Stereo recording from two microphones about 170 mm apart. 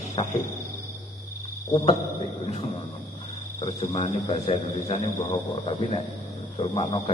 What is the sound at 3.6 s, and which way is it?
A man's voice, 35° left (ahead or behind).